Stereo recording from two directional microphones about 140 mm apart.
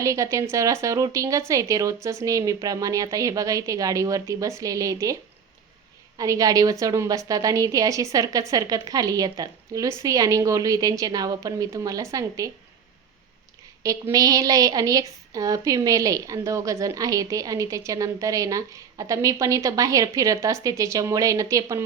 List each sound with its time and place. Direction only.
0.0 s a woman's voice: 20° right (ahead or behind)
6.1 s a woman's voice: 25° right (ahead or behind)
13.8 s a woman's voice: 25° right (ahead or behind)